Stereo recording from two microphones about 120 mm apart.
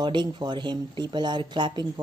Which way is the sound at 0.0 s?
40° right (ahead or behind).